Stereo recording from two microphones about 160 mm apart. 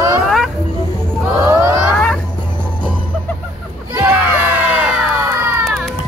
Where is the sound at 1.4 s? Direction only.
20° right (ahead or behind).